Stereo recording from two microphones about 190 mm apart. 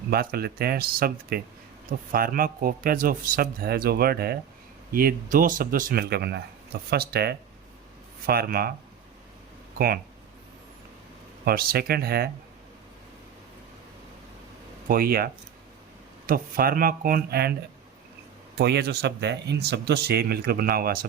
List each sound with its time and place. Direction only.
0.1 s speech: 55° right (ahead or behind)
9.7 s speech: 50° right (ahead or behind)
11.4 s speech: 50° right (ahead or behind)
14.8 s speech: 50° right (ahead or behind)
18.5 s speech: 60° right (ahead or behind)